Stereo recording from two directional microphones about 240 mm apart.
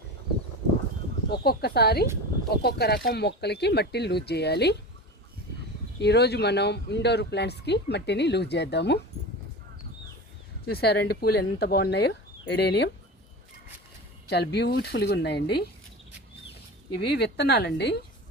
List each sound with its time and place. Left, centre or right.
1.5 s speech: left
6.0 s speech: left
10.7 s speech: left
14.3 s speech: left
17.0 s speech: left